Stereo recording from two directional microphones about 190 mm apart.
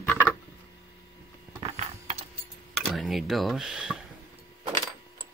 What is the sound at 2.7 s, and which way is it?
Speech, centre (ahead or behind).